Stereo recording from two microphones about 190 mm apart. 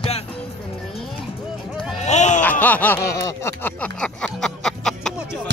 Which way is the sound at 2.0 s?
35° left (ahead or behind).